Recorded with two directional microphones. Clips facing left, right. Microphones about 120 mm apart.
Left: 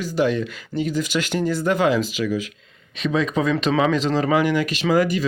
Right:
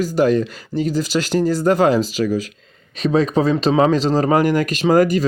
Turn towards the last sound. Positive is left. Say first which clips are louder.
# right 5 dB
turn(degrees=-45)  # may be behind; listen again after turning